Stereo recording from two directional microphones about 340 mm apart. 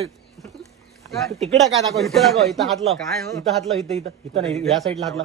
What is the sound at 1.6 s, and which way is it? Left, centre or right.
A man's voice, centre.